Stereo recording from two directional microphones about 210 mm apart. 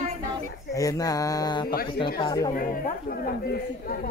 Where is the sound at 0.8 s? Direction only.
15° left (ahead or behind).